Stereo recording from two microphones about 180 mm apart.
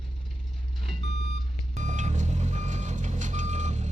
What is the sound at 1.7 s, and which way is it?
Reversing beeps, 40° right (ahead or behind).